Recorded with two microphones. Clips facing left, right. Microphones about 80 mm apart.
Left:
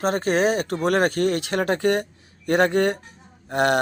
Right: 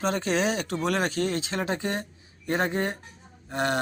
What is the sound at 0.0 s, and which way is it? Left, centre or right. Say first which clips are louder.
A man's voice: left 5 dB; left.